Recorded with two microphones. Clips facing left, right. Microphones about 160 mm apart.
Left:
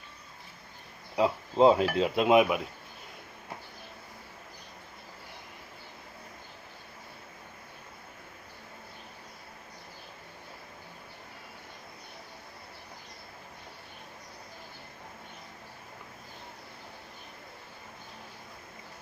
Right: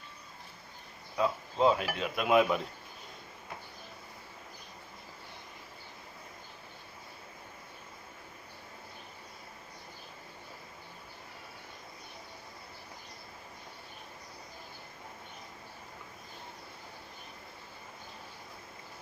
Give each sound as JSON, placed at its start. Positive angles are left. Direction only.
{"t": 1.1, "sound": "speech", "side_deg": 25}